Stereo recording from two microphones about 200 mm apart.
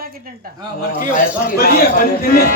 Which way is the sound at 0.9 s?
45° left (ahead or behind).